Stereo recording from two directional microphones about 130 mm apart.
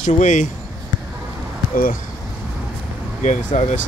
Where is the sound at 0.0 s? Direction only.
70° left (ahead or behind).